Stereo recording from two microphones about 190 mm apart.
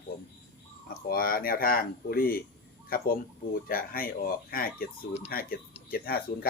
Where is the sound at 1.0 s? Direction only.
50° left (ahead or behind).